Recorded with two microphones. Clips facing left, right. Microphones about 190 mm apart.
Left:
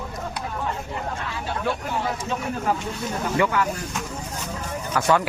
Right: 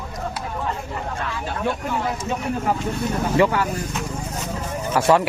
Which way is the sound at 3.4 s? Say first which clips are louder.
Right 3 dB; 30° right (ahead or behind).